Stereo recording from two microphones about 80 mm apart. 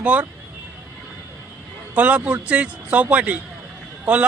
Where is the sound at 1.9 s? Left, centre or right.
Centre.